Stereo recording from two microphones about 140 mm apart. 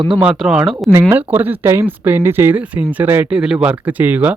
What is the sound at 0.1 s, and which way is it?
Speech, 5° right (ahead or behind).